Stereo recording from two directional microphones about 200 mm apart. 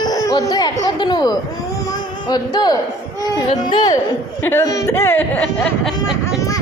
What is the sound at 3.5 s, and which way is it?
A woman's voice, 20° left (ahead or behind).